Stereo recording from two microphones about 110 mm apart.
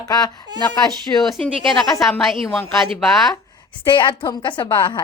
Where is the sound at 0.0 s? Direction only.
35° left (ahead or behind).